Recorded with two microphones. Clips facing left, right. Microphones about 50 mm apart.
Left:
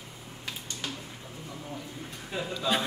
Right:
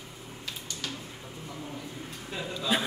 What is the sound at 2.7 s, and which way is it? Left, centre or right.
Speech, centre.